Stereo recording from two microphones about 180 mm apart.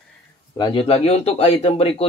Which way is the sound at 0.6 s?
25° left (ahead or behind).